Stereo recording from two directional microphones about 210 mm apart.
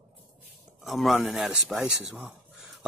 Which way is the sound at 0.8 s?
Centre (ahead or behind).